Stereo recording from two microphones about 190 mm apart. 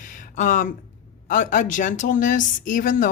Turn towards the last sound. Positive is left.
turn(degrees=45)  # may be behind; listen again after turning